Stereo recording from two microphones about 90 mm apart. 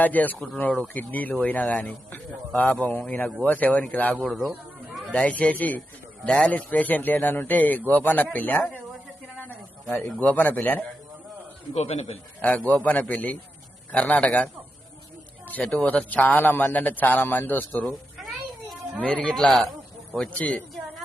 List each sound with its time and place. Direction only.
0.0 s a man's voice: 20° left (ahead or behind)
4.2 s speech: centre (ahead or behind)
5.1 s a man's voice: 15° left (ahead or behind)
10.2 s a man's voice: 20° left (ahead or behind)
12.4 s a man's voice: 15° left (ahead or behind)
19.0 s a man's voice: 10° left (ahead or behind)